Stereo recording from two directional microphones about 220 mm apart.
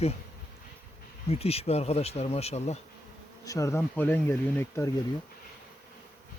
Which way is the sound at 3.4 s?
15° left (ahead or behind).